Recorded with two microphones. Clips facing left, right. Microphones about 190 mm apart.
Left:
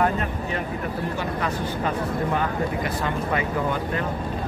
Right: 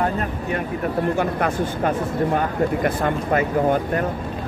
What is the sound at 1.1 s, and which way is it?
A man's voice, 55° right (ahead or behind).